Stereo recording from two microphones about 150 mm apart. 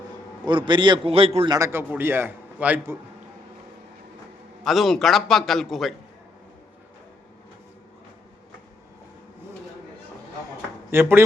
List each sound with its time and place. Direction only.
0.4 s a man's voice: 30° right (ahead or behind)
1.5 s a man's voice: 20° right (ahead or behind)
4.6 s a man's voice: centre (ahead or behind)
10.9 s a man's voice: 15° right (ahead or behind)